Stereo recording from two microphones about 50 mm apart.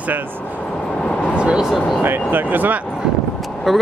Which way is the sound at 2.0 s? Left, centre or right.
Right.